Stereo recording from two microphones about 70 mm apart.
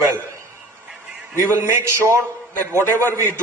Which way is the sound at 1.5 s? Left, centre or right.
Right.